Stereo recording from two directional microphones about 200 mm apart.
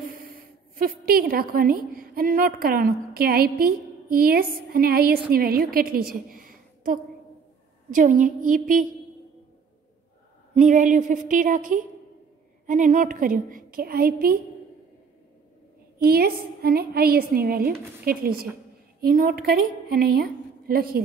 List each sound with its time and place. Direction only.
0.1 s a woman's voice: 45° right (ahead or behind)
10.5 s a woman's voice: 40° right (ahead or behind)
16.0 s a woman's voice: 50° right (ahead or behind)